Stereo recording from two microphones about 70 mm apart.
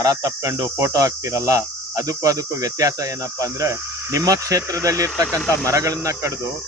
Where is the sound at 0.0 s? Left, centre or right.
Right.